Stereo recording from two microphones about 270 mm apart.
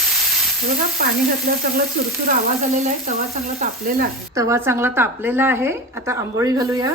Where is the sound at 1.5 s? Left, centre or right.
Right.